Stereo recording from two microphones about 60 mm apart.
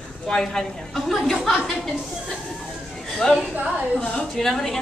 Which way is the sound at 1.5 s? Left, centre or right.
Centre.